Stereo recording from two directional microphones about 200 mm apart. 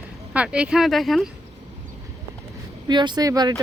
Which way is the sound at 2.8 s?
20° right (ahead or behind).